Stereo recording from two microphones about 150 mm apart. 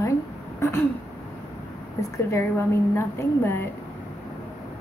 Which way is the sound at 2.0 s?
20° left (ahead or behind).